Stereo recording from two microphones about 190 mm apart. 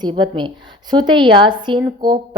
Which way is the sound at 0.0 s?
25° right (ahead or behind).